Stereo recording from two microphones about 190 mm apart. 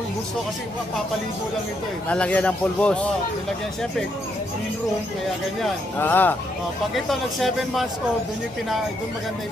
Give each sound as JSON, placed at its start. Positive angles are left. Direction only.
{"t": 2.0, "sound": "speech", "side_deg": 5}
{"t": 5.9, "sound": "speech", "side_deg": 10}